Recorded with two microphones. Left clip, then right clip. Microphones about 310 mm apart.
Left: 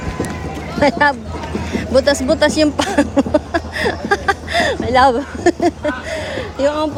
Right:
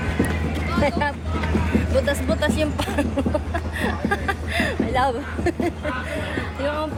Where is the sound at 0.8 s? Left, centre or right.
Left.